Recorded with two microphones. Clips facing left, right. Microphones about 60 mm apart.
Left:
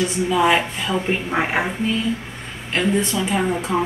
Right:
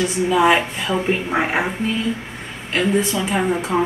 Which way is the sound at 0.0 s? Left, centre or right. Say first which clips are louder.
Right 2 dB; centre.